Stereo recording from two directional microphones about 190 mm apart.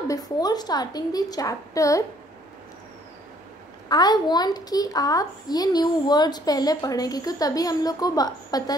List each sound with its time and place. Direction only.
0.1 s a child's voice: 20° left (ahead or behind)
3.9 s a child's voice: 20° left (ahead or behind)